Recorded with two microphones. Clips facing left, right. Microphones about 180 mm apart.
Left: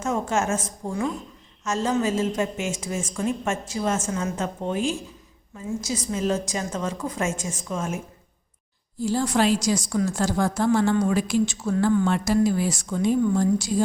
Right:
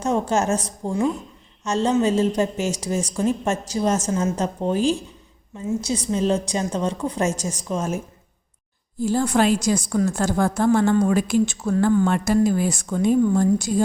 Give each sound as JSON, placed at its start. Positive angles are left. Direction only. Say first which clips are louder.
{"t": 0.0, "sound": "a woman's voice", "louder": "right 3 dB", "side_deg": -35}
{"t": 9.0, "sound": "a woman's voice", "louder": "right 3 dB", "side_deg": -55}